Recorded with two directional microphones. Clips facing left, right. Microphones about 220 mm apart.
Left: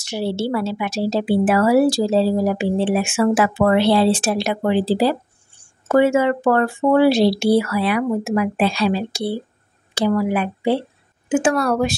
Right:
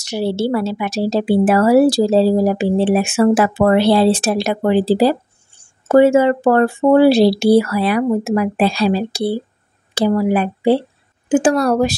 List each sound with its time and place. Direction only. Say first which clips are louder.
0.0 s speech: right 4 dB; 40° right (ahead or behind)